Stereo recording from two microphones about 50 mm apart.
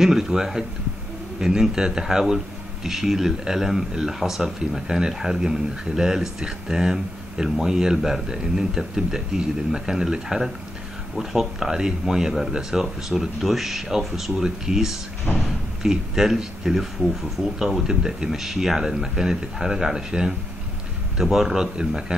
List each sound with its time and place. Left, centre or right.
0.0 s a man's voice: centre
15.3 s speech: left
15.8 s a man's voice: centre